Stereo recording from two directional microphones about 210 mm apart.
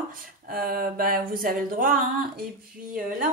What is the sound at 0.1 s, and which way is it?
A woman's voice, 45° right (ahead or behind).